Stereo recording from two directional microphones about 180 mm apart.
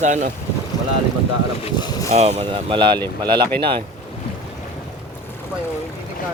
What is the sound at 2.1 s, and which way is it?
Speech, 35° right (ahead or behind).